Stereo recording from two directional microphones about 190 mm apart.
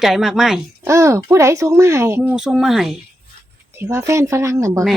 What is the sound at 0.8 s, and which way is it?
Speech, 15° right (ahead or behind).